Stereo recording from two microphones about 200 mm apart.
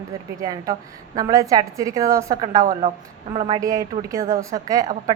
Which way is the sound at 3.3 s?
30° right (ahead or behind).